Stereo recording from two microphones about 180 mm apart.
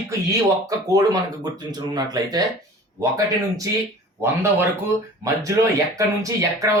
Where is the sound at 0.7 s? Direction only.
20° right (ahead or behind).